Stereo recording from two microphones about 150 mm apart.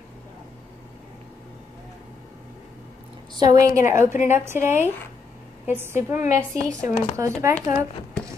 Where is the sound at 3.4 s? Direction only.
25° right (ahead or behind).